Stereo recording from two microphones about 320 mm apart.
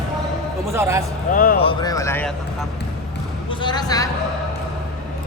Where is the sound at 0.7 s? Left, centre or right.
Centre.